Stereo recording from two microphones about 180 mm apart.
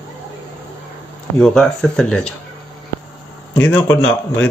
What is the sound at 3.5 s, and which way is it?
Speech, 15° left (ahead or behind).